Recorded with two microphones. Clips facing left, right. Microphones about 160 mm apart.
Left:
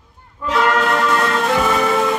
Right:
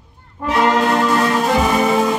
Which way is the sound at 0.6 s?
20° right (ahead or behind).